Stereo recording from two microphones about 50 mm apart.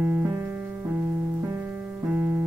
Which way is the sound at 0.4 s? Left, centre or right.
Right.